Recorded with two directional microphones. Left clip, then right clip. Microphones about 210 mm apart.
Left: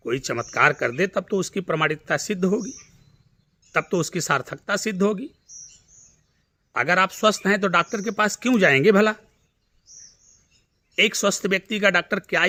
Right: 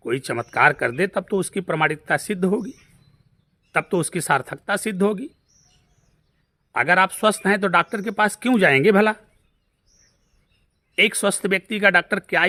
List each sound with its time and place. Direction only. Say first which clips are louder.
0.0 s speech: right 1 dB; 20° right (ahead or behind)
6.7 s speech: right 3 dB; 15° right (ahead or behind)
10.9 s speech: right 1 dB; 20° right (ahead or behind)